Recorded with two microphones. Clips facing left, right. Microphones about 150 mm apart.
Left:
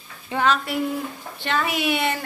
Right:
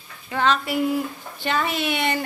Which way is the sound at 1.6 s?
10° left (ahead or behind).